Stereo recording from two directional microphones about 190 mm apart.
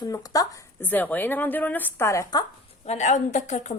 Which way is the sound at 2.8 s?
35° left (ahead or behind).